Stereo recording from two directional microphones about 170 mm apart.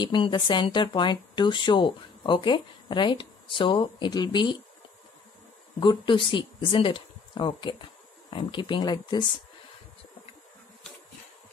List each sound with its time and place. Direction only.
0.0 s speech: 25° left (ahead or behind)
5.8 s speech: 30° left (ahead or behind)